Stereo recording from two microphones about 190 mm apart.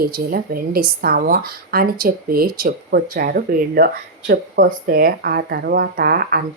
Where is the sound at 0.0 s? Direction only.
50° right (ahead or behind).